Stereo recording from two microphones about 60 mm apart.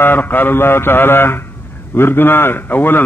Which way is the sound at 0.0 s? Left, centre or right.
Left.